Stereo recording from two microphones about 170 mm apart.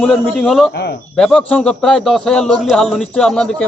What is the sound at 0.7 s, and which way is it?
Speech, 80° left.